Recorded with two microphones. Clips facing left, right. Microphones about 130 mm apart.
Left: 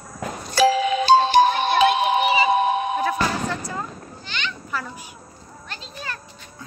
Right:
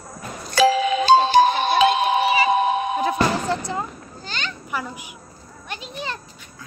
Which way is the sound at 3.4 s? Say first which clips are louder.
Right 3 dB; 25° right (ahead or behind).